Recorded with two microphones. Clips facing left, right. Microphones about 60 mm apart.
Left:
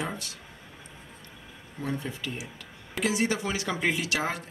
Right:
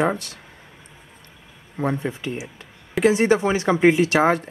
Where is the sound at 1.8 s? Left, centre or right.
Right.